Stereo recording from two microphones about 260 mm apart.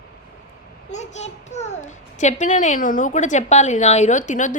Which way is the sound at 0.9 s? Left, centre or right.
Left.